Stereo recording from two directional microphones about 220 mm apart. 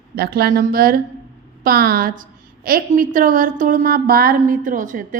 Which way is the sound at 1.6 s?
45° right (ahead or behind).